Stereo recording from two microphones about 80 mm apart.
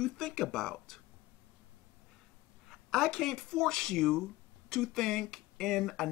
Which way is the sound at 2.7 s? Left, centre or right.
Centre.